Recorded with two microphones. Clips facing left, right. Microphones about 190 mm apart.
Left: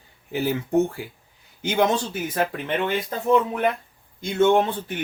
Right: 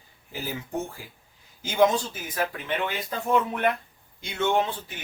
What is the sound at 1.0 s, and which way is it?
Speech, 65° left (ahead or behind).